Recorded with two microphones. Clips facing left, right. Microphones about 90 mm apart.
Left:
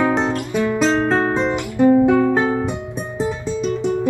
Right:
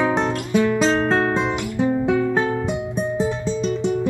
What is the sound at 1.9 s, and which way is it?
Music, 55° left (ahead or behind).